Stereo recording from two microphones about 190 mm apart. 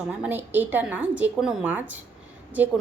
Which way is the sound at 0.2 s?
10° right (ahead or behind).